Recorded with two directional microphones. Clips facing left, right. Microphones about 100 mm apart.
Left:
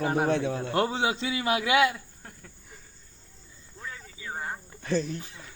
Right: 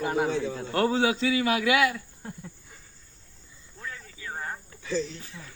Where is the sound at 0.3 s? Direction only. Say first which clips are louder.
Left 2 dB; 65° left (ahead or behind).